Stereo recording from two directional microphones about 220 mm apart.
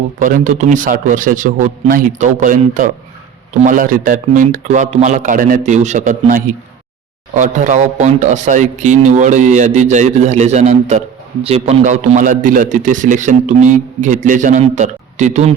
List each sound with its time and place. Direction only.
0.2 s a man's voice: 35° right (ahead or behind)